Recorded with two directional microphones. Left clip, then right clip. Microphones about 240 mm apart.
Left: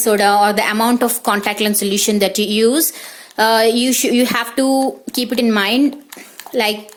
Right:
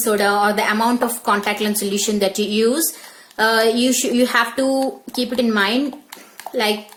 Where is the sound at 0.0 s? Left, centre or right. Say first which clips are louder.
Left 4 dB; left.